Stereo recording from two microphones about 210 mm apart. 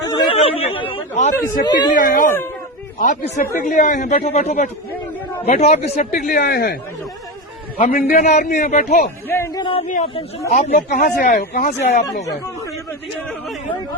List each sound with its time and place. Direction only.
0.3 s speech: 30° left (ahead or behind)
1.6 s speech: 20° left (ahead or behind)
1.9 s speech: 40° left (ahead or behind)
7.8 s speech: 40° left (ahead or behind)
9.3 s speech: 15° left (ahead or behind); by 12.0 s 35° left (ahead or behind)